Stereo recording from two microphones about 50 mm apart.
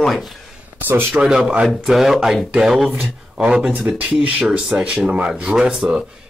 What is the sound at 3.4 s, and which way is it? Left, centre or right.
Speech, centre.